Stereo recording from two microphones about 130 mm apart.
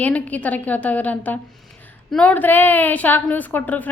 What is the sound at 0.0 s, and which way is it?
A woman's voice, 10° left (ahead or behind).